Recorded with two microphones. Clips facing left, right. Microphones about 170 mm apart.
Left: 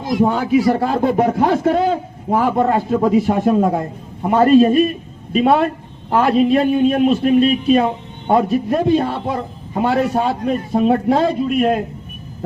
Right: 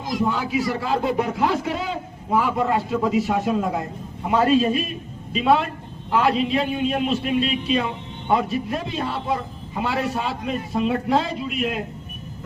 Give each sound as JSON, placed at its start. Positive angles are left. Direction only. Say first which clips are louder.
{"t": 0.2, "sound": "a man's voice", "louder": "left 8 dB", "side_deg": 50}